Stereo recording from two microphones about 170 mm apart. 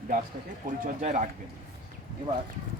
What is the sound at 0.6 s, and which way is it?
Speech, 55° right (ahead or behind).